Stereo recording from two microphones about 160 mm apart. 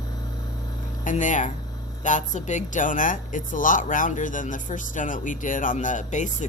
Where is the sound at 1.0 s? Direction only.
50° left (ahead or behind).